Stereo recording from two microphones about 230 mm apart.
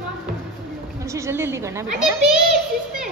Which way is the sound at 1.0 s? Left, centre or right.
Centre.